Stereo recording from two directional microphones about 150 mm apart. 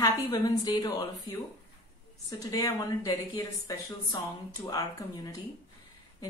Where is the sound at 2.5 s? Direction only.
20° left (ahead or behind).